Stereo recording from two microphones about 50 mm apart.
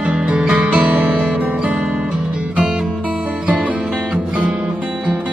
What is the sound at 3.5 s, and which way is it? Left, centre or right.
Music, right.